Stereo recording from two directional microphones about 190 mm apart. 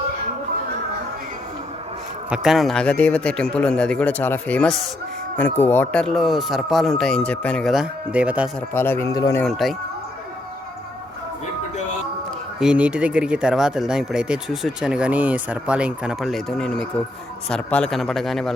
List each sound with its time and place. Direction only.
2.3 s speech: centre (ahead or behind)
8.7 s speech: 10° left (ahead or behind)
9.4 s speech: centre (ahead or behind)
12.5 s speech: 5° right (ahead or behind)